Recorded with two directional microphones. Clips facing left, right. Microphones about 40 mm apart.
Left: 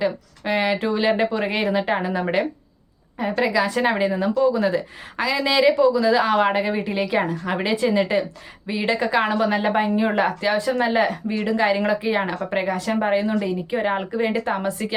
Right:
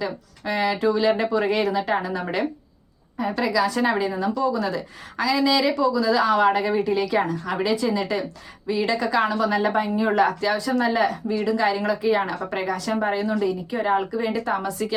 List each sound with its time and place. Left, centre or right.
0.0 s a woman's voice: left